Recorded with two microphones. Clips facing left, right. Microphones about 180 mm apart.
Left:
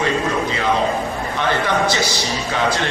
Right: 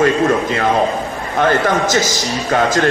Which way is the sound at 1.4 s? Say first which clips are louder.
Right 5 dB; 45° right (ahead or behind).